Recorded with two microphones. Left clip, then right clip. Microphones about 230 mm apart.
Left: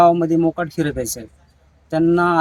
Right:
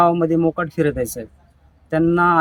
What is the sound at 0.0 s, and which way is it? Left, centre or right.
Speech, centre.